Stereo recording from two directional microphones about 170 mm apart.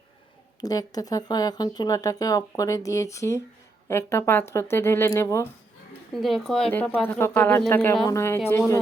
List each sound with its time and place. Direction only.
0.6 s speech: 20° left (ahead or behind)
6.1 s speech: centre (ahead or behind); by 8.8 s 15° left (ahead or behind)